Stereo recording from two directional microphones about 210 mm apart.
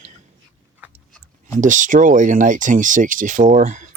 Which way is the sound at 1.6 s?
35° right (ahead or behind).